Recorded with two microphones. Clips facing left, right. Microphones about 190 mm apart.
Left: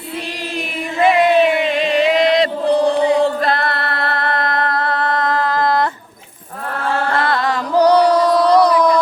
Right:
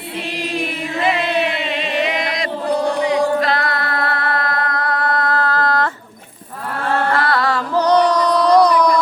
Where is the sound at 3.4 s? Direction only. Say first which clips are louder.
Left 1 dB; 55° left (ahead or behind).